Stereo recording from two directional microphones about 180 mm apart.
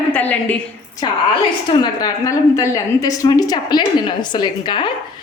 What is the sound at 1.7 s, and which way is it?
A woman's voice, 20° left (ahead or behind).